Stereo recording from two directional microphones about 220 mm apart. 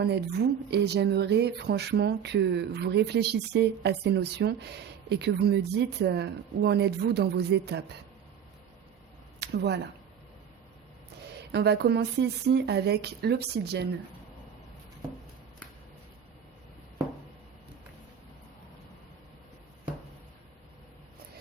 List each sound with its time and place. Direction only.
0.0 s speech: 50° right (ahead or behind)
9.4 s speech: 50° right (ahead or behind)
11.5 s speech: 50° right (ahead or behind)